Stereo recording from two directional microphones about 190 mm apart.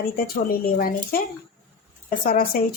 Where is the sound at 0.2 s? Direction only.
50° left (ahead or behind).